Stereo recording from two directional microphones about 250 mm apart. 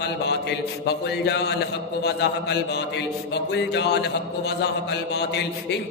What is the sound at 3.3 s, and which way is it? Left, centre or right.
Mantra, left.